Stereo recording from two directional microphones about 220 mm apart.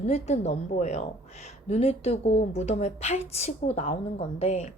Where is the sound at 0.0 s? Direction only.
30° left (ahead or behind).